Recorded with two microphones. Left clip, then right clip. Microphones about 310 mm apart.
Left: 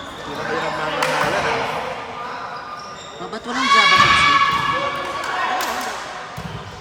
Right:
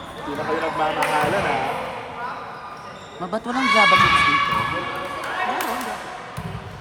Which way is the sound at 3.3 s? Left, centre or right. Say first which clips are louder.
Left 2 dB; centre.